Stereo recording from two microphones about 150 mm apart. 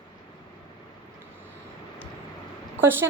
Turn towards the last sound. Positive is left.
turn(degrees=-15)  # may be behind; listen again after turning